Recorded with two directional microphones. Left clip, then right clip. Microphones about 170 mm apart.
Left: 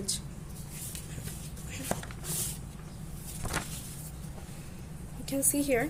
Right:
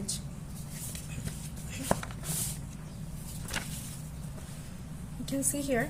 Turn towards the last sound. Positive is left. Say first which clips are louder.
# left 2 dB
turn(degrees=35)  # may be behind; listen again after turning